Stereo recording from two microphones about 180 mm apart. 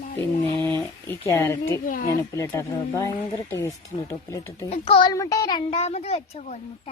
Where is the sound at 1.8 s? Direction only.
50° left (ahead or behind).